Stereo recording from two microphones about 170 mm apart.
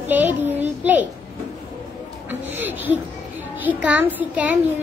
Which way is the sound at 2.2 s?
10° right (ahead or behind).